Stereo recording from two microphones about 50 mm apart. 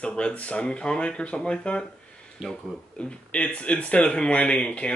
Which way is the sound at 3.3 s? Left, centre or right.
Left.